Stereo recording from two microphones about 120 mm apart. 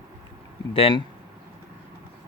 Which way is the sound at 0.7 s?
45° left (ahead or behind).